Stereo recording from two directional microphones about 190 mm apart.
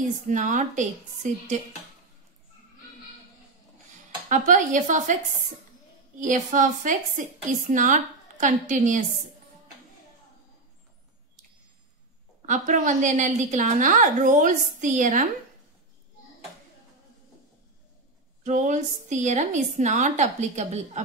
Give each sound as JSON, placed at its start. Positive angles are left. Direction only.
{"t": 0.3, "sound": "a woman's voice", "side_deg": -40}
{"t": 4.3, "sound": "a woman's voice", "side_deg": -40}
{"t": 6.2, "sound": "a woman's voice", "side_deg": -45}
{"t": 12.4, "sound": "a woman's voice", "side_deg": -40}
{"t": 18.4, "sound": "a woman's voice", "side_deg": -40}